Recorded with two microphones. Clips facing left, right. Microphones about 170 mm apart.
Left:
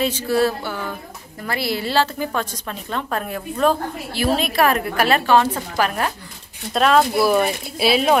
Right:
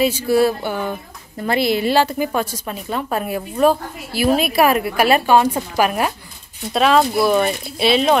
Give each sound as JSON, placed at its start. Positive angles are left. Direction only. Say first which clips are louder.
{"t": 0.0, "sound": "a woman's voice", "louder": "right 3 dB", "side_deg": -10}
{"t": 6.7, "sound": "speech", "louder": "right 1 dB", "side_deg": 0}